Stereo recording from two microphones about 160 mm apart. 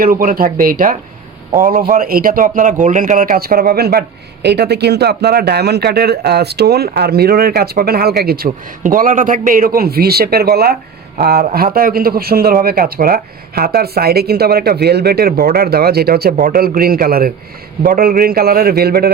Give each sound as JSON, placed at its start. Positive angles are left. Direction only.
{"t": 0.0, "sound": "speech", "side_deg": -65}
{"t": 4.4, "sound": "speech", "side_deg": -90}
{"t": 8.8, "sound": "a man's voice", "side_deg": -60}